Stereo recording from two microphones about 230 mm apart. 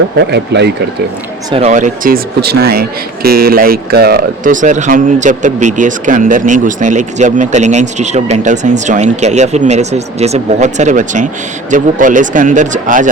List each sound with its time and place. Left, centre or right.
0.3 s speech: right
1.5 s speech: right